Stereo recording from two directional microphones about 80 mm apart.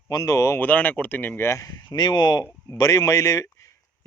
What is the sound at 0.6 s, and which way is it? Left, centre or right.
Speech, left.